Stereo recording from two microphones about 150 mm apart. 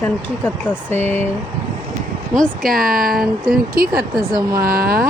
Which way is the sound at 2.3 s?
Centre (ahead or behind).